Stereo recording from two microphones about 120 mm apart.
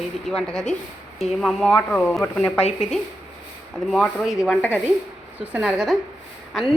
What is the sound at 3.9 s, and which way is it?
A woman's voice, centre (ahead or behind).